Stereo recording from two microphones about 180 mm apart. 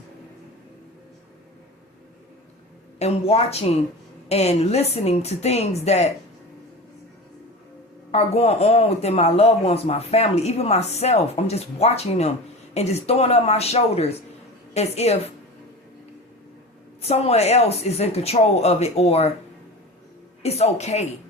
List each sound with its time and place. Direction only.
3.0 s speech: 35° left (ahead or behind)
8.1 s speech: 35° left (ahead or behind)
17.0 s speech: 35° left (ahead or behind)
20.4 s speech: 35° left (ahead or behind)